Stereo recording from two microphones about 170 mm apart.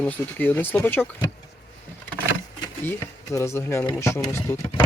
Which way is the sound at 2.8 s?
15° left (ahead or behind).